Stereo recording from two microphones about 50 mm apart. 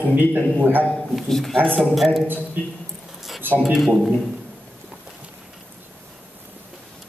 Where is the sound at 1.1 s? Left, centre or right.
Centre.